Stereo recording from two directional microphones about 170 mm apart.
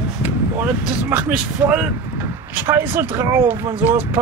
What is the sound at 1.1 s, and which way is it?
Speech, 10° right (ahead or behind).